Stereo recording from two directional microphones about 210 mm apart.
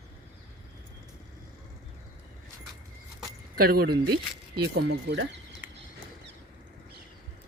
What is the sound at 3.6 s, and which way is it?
Speech, 45° right (ahead or behind).